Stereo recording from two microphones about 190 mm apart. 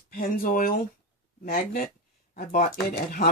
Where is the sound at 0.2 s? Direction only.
50° left (ahead or behind).